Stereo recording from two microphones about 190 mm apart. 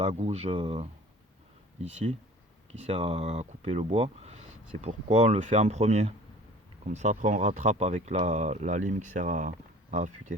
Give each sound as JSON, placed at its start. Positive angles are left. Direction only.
{"t": 0.0, "sound": "speech", "side_deg": -35}